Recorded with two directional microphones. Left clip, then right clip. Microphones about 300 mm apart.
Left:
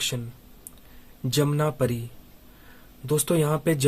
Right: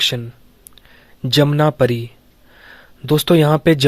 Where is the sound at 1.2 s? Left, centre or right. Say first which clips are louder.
Right 10 dB; right.